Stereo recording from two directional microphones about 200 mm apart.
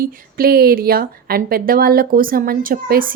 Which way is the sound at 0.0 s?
50° right (ahead or behind).